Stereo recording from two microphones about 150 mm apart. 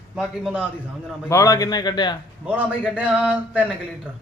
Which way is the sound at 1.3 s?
20° left (ahead or behind).